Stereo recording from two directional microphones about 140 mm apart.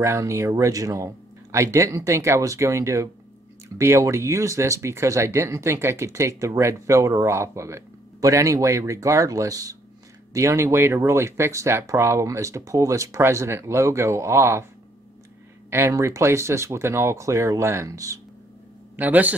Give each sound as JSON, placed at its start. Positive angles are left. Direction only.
{"t": 0.0, "sound": "speech", "side_deg": -20}
{"t": 15.7, "sound": "speech", "side_deg": -20}
{"t": 18.9, "sound": "a man's voice", "side_deg": -10}